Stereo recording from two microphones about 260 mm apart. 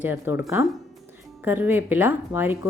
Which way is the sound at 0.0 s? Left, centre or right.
Centre.